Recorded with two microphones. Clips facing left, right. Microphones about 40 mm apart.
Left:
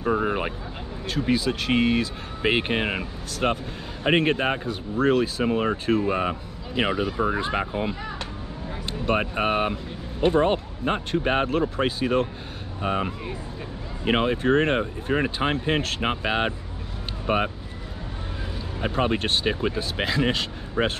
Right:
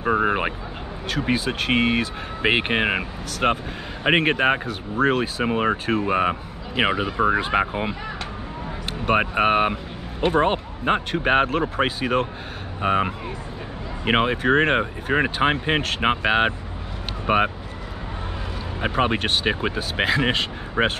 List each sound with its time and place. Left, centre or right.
0.0 s vehicle: right
1.2 s speech: right
9.0 s speech: right
18.8 s a man's voice: right